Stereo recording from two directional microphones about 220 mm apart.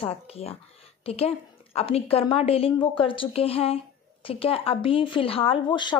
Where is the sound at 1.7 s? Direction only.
25° left (ahead or behind).